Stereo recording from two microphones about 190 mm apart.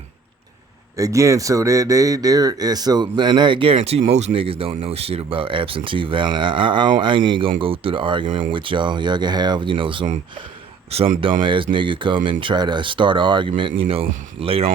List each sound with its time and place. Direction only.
0.9 s speech: 15° right (ahead or behind)
8.3 s speech: 45° right (ahead or behind)
8.5 s speech: 25° right (ahead or behind)